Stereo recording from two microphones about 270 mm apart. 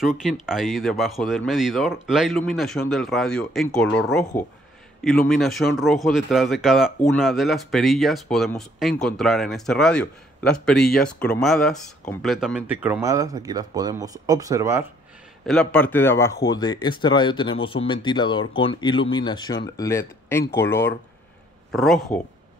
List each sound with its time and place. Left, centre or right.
0.2 s speech: centre
15.4 s speech: centre